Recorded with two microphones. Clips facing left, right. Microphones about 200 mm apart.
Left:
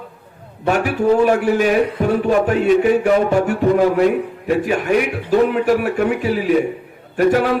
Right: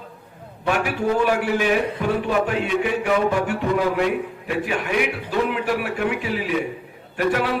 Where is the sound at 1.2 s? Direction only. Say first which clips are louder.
Left 5 dB; 45° left (ahead or behind).